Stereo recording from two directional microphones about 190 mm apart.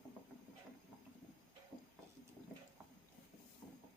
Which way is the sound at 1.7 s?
15° right (ahead or behind).